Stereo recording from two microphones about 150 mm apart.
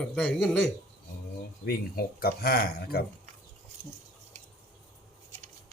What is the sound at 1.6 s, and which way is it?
Speech, 90° left.